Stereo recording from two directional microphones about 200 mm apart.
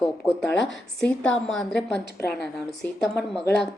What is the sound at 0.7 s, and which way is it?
Speech, 5° left (ahead or behind).